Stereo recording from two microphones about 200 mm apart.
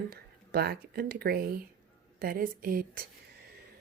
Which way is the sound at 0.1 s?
50° right (ahead or behind).